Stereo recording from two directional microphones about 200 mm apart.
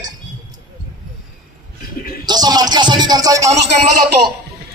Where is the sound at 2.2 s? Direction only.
20° right (ahead or behind).